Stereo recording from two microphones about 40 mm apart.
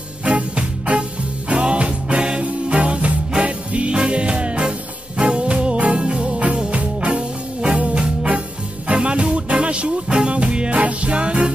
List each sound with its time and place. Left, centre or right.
0.2 s music: right